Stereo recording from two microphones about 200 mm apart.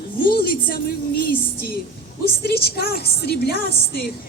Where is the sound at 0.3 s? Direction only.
50° left (ahead or behind).